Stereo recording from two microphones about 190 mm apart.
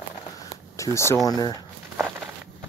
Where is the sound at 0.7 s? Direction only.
15° left (ahead or behind).